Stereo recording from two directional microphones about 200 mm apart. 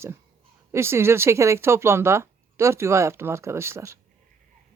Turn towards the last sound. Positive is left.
turn(degrees=-15)  # may be behind; listen again after turning